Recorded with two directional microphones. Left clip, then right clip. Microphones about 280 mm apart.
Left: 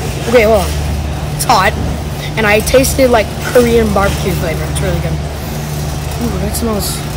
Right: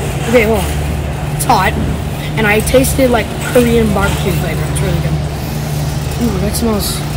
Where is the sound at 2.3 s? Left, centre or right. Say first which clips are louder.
Left 2 dB; centre.